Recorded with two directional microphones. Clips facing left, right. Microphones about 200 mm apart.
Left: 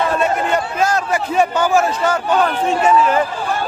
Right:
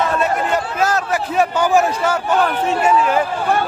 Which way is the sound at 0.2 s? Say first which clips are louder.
Left 1 dB; 5° right (ahead or behind).